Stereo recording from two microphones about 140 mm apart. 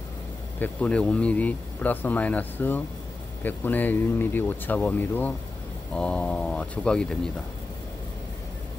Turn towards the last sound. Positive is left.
turn(degrees=5)  # may be behind; listen again after turning